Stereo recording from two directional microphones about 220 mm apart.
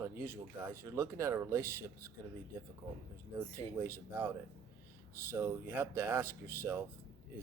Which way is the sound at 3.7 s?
10° right (ahead or behind).